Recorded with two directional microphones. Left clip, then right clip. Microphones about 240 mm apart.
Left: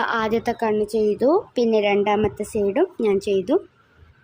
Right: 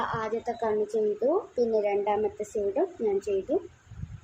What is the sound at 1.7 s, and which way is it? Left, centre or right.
Speech, left.